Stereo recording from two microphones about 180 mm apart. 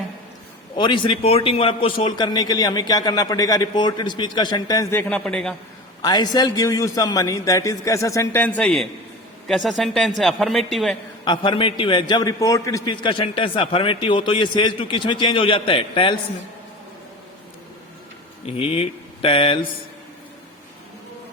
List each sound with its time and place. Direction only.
0.8 s a man's voice: 25° left (ahead or behind); by 5.5 s 5° left (ahead or behind)
6.0 s a man's voice: 20° left (ahead or behind); by 10.9 s centre (ahead or behind)
11.3 s a man's voice: 30° left (ahead or behind)
18.4 s speech: 30° left (ahead or behind)